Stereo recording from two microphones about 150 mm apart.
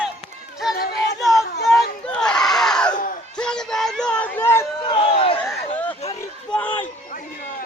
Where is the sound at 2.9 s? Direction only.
65° left (ahead or behind).